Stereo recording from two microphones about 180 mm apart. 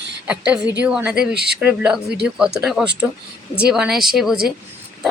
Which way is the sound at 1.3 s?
65° right (ahead or behind).